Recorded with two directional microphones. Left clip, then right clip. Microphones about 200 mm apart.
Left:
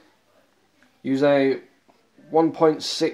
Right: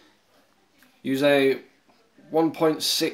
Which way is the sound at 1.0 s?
15° left (ahead or behind).